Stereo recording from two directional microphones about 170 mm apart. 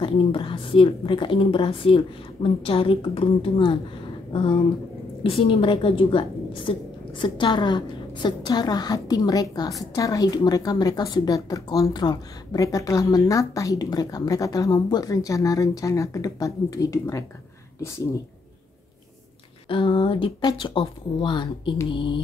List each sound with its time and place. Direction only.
0.0 s a woman's voice: 30° left (ahead or behind)
19.7 s a woman's voice: 30° left (ahead or behind)